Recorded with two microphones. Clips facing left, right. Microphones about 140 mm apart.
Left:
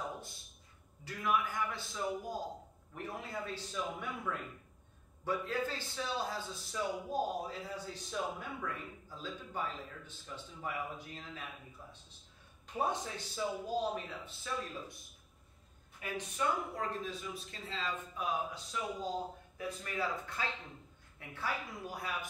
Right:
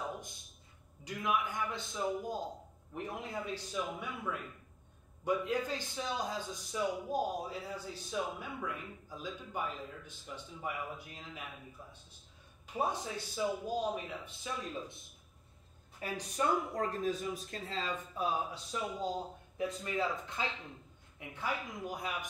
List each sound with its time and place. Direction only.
1.0 s a man's voice: 15° right (ahead or behind)
12.6 s a man's voice: 10° right (ahead or behind)
16.0 s a man's voice: 40° right (ahead or behind); by 22.3 s 20° right (ahead or behind)